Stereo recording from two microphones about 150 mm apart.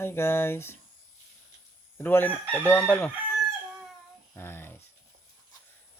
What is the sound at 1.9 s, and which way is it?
Speech, 15° left (ahead or behind).